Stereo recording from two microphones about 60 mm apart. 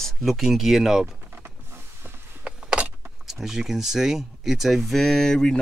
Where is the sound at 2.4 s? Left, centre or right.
Centre.